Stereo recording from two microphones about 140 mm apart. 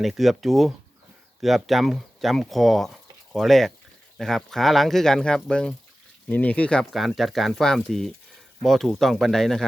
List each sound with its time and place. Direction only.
0.0 s speech: centre (ahead or behind)